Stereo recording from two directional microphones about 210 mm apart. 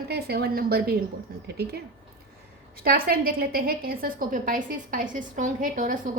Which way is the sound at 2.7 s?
45° right (ahead or behind).